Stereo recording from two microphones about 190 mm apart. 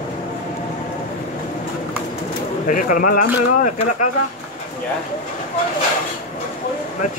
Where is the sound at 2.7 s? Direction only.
45° left (ahead or behind).